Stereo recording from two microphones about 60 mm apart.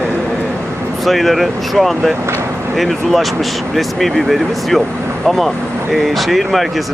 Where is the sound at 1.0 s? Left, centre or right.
Centre.